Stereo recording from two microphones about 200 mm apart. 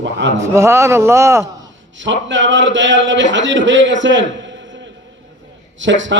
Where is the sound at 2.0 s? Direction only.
65° right (ahead or behind).